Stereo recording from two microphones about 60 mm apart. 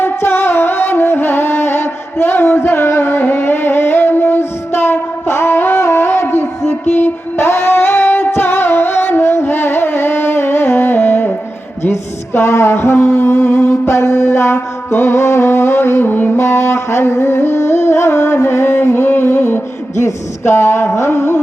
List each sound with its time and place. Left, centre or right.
0.0 s music: left
13.4 s music: left
13.8 s music: left
16.4 s music: left
20.1 s a sound: left